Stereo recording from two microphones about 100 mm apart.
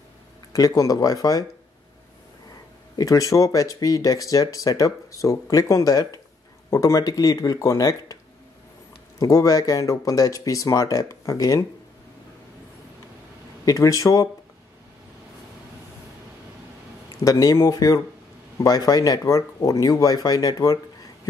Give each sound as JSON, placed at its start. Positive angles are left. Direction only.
{"t": 0.5, "sound": "speech", "side_deg": 35}
{"t": 3.0, "sound": "speech", "side_deg": 35}
{"t": 9.2, "sound": "speech", "side_deg": 35}
{"t": 13.7, "sound": "speech", "side_deg": 35}
{"t": 17.2, "sound": "speech", "side_deg": 35}